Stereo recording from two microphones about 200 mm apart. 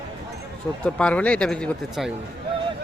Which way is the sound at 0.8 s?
5° left (ahead or behind).